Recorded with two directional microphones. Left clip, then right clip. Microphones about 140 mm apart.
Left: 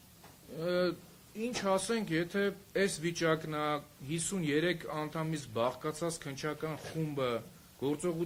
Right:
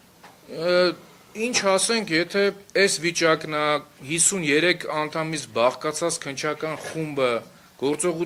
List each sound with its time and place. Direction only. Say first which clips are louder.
0.6 s speech: right 12 dB; 30° right (ahead or behind)